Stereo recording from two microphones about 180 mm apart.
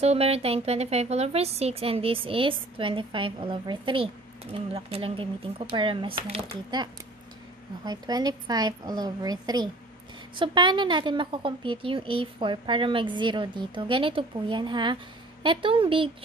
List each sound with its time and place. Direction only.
0.0 s a woman's voice: 35° right (ahead or behind)